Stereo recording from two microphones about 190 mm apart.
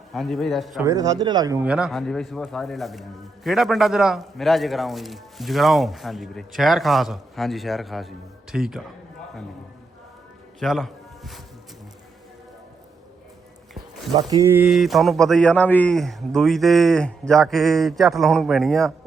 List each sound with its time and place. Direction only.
0.1 s speech: centre (ahead or behind)
0.9 s speech: 20° right (ahead or behind)
1.6 s speech: 5° right (ahead or behind)
10.6 s a man's voice: centre (ahead or behind)
13.7 s a sound: 20° right (ahead or behind)
14.7 s speech: centre (ahead or behind)